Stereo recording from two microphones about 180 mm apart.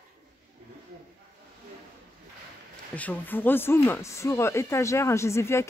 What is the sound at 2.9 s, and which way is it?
Speech, 10° left (ahead or behind).